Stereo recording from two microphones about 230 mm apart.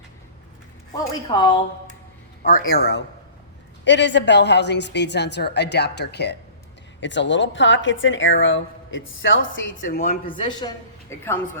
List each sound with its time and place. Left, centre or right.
0.9 s a man's voice: centre
2.4 s a woman's voice: left
9.7 s a man's voice: left; by 11.3 s centre